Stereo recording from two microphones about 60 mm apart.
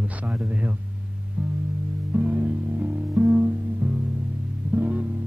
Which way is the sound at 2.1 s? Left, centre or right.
Right.